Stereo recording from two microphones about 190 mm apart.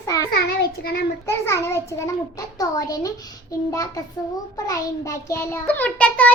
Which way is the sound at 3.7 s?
20° left (ahead or behind).